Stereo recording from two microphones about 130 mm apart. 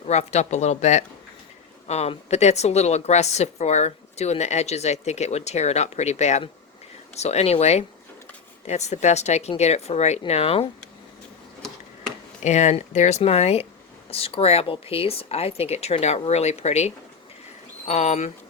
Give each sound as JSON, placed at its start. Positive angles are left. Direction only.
{"t": 0.0, "sound": "a woman's voice", "side_deg": 60}
{"t": 12.4, "sound": "a woman's voice", "side_deg": 60}